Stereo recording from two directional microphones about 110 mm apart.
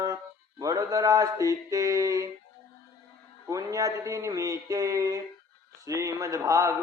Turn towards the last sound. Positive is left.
turn(degrees=-30)  # may be behind; listen again after turning